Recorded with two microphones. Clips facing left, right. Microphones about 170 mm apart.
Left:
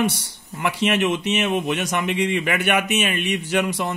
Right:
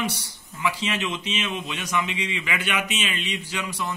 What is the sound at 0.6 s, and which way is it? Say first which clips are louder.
Speech: left 6 dB; 65° left (ahead or behind).